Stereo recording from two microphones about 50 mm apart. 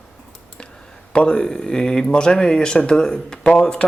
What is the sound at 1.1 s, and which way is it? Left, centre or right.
Speech, centre.